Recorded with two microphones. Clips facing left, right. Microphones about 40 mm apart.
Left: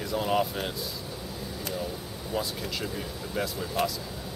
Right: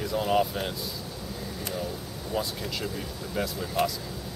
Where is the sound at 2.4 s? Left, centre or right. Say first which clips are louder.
Right 1 dB; centre.